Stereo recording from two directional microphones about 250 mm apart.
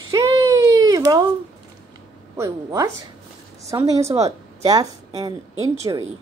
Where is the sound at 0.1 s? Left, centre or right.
Centre.